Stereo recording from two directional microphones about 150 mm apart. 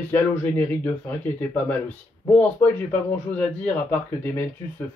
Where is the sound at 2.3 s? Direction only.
10° left (ahead or behind).